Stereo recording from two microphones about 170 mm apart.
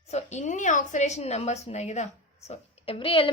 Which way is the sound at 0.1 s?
45° left (ahead or behind).